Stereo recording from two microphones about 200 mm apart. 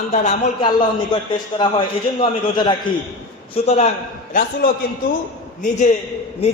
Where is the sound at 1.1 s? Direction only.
20° left (ahead or behind).